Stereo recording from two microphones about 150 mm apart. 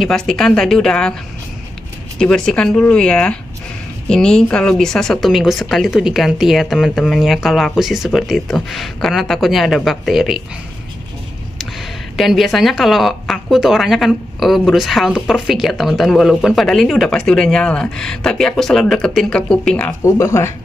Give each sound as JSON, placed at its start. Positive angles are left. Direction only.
{"t": 0.0, "sound": "a woman's voice", "side_deg": 5}
{"t": 2.1, "sound": "a woman's voice", "side_deg": 5}
{"t": 11.5, "sound": "a woman's voice", "side_deg": 0}
{"t": 20.1, "sound": "speech", "side_deg": 20}